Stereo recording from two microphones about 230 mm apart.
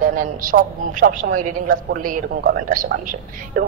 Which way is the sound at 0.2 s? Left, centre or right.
Right.